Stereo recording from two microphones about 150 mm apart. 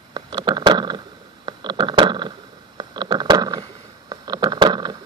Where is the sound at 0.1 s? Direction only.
30° right (ahead or behind).